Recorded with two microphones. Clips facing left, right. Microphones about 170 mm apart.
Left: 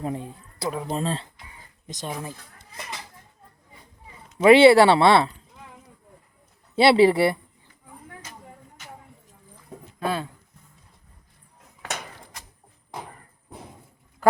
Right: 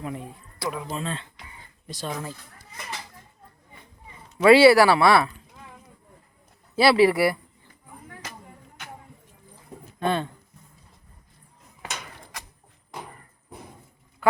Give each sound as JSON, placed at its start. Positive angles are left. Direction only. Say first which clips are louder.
{"t": 0.0, "sound": "speech", "louder": "left 4 dB", "side_deg": 30}
{"t": 1.9, "sound": "speech", "louder": "right 1 dB", "side_deg": 20}
{"t": 4.4, "sound": "speech", "louder": "left 1 dB", "side_deg": 25}
{"t": 6.7, "sound": "speech", "louder": "left 2 dB", "side_deg": 25}
{"t": 8.2, "sound": "music", "louder": "right 3 dB", "side_deg": -80}
{"t": 8.8, "sound": "music", "louder": "right 3 dB", "side_deg": -65}
{"t": 10.0, "sound": "speech", "louder": "right 2 dB", "side_deg": 5}